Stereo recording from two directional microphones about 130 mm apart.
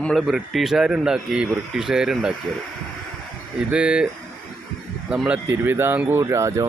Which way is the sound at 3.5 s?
10° right (ahead or behind).